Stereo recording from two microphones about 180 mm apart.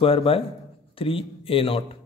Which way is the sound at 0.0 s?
30° left (ahead or behind).